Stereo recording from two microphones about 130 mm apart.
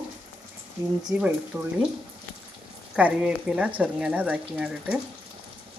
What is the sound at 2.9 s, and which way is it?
Speech, 5° right (ahead or behind).